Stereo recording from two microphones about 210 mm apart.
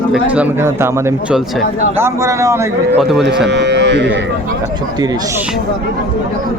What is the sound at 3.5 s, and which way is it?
Speech, 55° right (ahead or behind).